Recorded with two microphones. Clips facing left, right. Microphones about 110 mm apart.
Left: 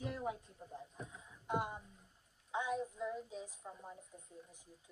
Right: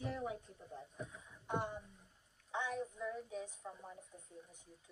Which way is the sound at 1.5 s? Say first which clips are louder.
Left 1 dB; 10° left (ahead or behind).